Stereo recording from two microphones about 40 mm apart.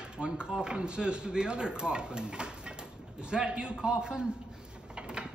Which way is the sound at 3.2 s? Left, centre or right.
Right.